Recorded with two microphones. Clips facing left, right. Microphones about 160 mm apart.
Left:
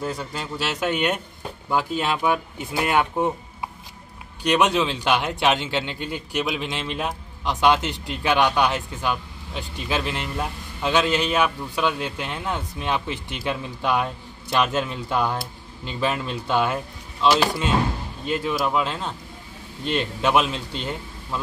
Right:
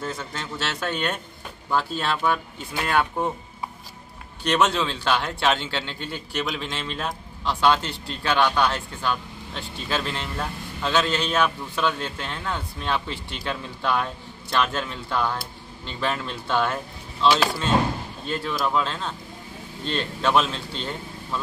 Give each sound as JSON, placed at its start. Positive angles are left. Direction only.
{"t": 0.0, "sound": "a man's voice", "side_deg": 10}
{"t": 4.4, "sound": "a man's voice", "side_deg": 15}
{"t": 18.2, "sound": "a man's voice", "side_deg": 15}